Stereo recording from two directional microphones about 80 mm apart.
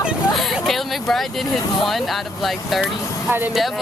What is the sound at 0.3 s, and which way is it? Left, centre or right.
Vehicle, centre.